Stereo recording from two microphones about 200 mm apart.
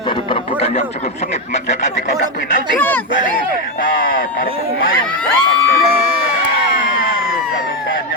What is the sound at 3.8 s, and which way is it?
Speech, 45° left (ahead or behind).